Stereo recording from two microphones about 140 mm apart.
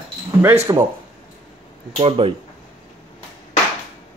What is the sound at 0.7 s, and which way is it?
Speech, 25° right (ahead or behind).